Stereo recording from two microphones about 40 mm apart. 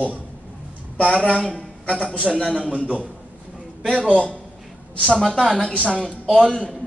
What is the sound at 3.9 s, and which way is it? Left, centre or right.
Speech, right.